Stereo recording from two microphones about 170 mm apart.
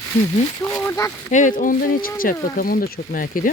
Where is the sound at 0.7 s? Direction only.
15° left (ahead or behind).